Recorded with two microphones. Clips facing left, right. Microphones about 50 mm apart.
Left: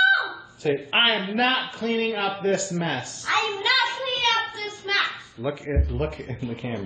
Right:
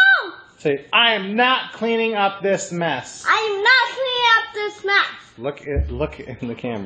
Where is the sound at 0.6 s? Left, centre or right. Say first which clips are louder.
Right 4 dB; right.